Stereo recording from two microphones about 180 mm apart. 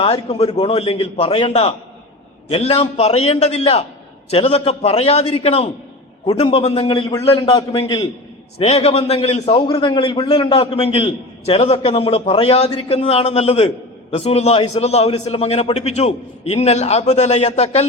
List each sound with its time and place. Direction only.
0.0 s a man's voice: 35° left (ahead or behind)
8.5 s a man's voice: 35° left (ahead or behind)